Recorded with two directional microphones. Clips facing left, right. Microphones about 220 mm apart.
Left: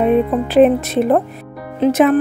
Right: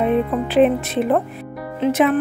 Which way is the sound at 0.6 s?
40° left (ahead or behind).